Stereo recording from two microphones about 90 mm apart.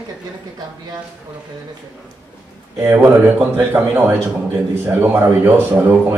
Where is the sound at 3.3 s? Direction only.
20° right (ahead or behind).